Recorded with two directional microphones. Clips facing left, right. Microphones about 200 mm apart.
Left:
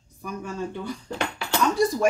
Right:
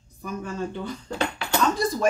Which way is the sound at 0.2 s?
10° left (ahead or behind).